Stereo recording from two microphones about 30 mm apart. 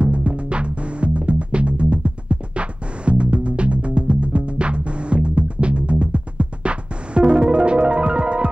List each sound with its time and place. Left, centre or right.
0.0 s music: right